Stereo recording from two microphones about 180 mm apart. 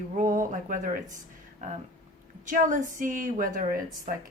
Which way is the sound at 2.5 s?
45° right (ahead or behind).